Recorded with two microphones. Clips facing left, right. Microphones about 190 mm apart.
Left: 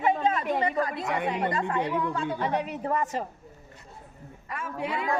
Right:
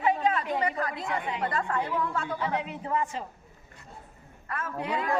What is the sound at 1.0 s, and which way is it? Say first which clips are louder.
Speech: left 3 dB; 70° left (ahead or behind).